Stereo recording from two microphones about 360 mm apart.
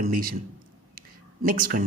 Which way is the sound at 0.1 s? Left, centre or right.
Right.